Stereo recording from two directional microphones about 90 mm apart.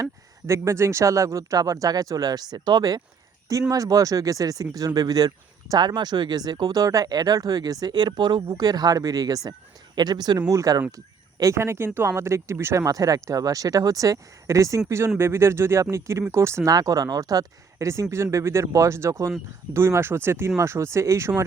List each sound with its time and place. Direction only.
0.0 s speech: 35° right (ahead or behind); by 10.4 s 50° right (ahead or behind)
10.5 s speech: 40° right (ahead or behind)